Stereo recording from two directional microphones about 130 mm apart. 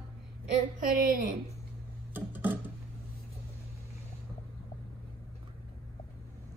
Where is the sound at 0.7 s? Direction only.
90° right.